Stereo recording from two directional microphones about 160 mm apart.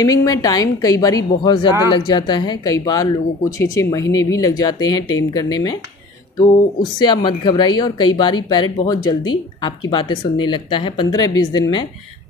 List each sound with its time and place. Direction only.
0.0 s speech: 20° left (ahead or behind)